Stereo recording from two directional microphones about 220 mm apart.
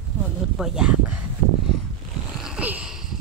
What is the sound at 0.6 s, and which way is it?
Speech, 5° right (ahead or behind).